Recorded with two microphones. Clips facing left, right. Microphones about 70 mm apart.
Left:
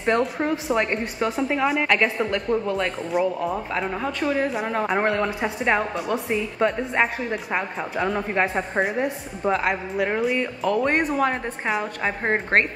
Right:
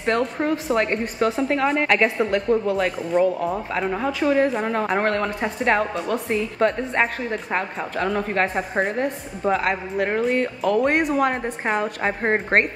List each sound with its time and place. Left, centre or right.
0.0 s a woman's voice: centre
10.8 s a woman's voice: centre